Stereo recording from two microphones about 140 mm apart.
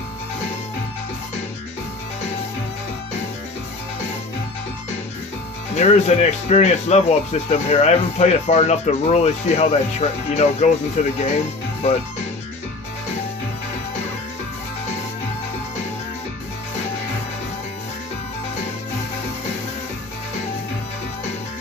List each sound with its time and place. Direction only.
5.7 s speech: 50° left (ahead or behind)